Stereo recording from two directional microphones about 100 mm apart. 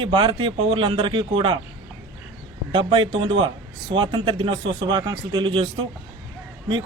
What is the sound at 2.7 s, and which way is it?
Speech, 55° right (ahead or behind).